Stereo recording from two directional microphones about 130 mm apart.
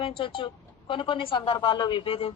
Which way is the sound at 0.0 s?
40° left (ahead or behind).